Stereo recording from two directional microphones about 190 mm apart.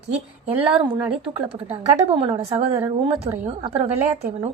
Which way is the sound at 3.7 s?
35° right (ahead or behind).